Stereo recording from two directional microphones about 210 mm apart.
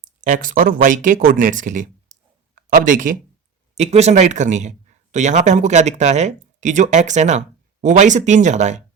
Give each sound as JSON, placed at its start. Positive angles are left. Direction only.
{"t": 0.0, "sound": "a man's voice", "side_deg": -40}